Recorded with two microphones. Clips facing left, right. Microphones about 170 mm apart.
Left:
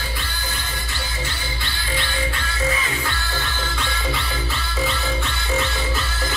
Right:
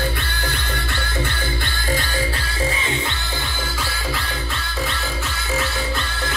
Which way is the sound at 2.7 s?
25° right (ahead or behind).